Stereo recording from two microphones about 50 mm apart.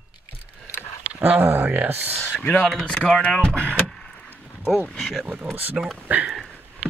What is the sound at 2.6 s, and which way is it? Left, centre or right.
Speech, centre.